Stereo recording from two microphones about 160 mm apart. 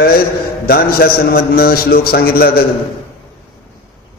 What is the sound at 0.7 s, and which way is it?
A man's voice, 70° left (ahead or behind).